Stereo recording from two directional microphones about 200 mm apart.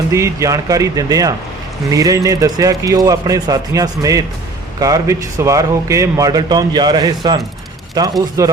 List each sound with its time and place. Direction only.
0.1 s a man's voice: 15° right (ahead or behind)